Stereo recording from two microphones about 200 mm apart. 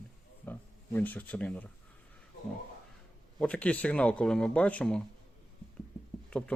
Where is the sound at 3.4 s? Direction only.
5° left (ahead or behind).